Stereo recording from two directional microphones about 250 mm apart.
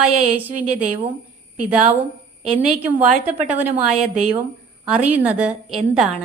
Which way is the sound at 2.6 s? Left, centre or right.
Centre.